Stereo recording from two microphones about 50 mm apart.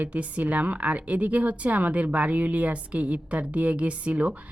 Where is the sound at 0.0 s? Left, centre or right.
Right.